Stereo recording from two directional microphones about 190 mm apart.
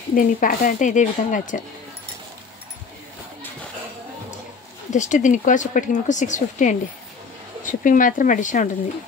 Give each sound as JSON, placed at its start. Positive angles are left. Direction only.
{"t": 0.1, "sound": "speech", "side_deg": 45}
{"t": 4.9, "sound": "speech", "side_deg": 40}